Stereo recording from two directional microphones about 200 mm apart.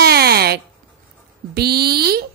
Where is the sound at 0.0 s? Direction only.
50° right (ahead or behind).